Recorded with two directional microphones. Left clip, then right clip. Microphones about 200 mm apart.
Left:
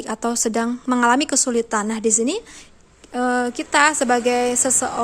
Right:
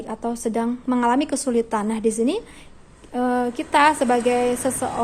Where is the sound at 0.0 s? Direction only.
25° left (ahead or behind).